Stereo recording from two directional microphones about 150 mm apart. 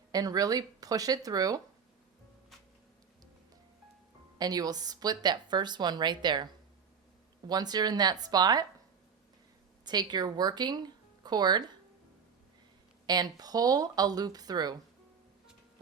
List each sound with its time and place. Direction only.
0.1 s a woman's voice: 25° right (ahead or behind)
4.4 s a woman's voice: 25° right (ahead or behind)
9.8 s a woman's voice: 30° right (ahead or behind)
13.1 s a woman's voice: 25° right (ahead or behind)